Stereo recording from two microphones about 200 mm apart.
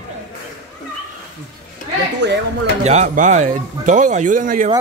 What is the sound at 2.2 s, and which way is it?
Speech, 60° right (ahead or behind).